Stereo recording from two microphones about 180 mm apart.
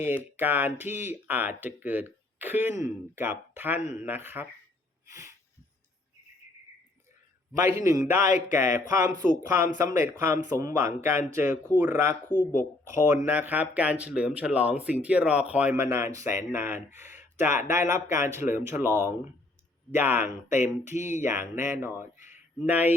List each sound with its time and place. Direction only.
0.0 s speech: 10° right (ahead or behind)
5.0 s a sound: 15° right (ahead or behind)
7.5 s speech: 15° right (ahead or behind)
12.3 s speech: 10° left (ahead or behind)
12.5 s speech: 15° right (ahead or behind)
20.5 s a sound: 40° left (ahead or behind)
21.2 s speech: 15° right (ahead or behind)